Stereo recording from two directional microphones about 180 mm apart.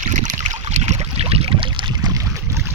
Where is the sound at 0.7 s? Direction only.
40° right (ahead or behind); by 2.6 s 15° right (ahead or behind).